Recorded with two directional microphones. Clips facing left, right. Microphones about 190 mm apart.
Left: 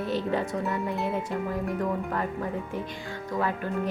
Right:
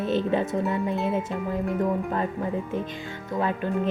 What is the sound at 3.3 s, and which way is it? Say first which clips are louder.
Speech: right 2 dB; 20° right (ahead or behind).